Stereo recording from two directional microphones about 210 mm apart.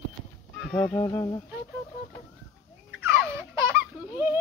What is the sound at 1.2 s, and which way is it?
Humming, 20° left (ahead or behind).